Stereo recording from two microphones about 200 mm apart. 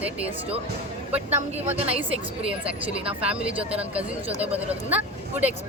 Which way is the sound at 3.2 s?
5° right (ahead or behind).